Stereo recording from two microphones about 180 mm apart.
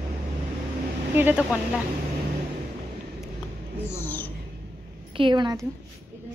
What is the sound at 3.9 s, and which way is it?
Speech, 10° left (ahead or behind).